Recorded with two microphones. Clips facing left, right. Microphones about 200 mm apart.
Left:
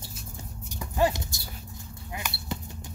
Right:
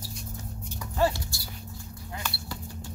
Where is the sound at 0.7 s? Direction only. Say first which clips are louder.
Left 1 dB; 15° left (ahead or behind).